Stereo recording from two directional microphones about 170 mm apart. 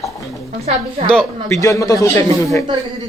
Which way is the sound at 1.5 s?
20° left (ahead or behind).